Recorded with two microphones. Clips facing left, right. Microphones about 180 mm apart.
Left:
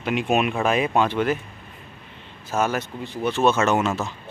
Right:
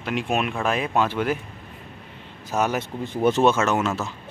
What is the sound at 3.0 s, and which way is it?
Speech, 50° right (ahead or behind).